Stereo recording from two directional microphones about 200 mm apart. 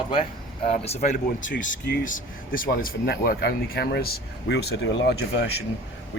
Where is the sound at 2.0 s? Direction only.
45° left (ahead or behind); by 5.4 s 60° left (ahead or behind).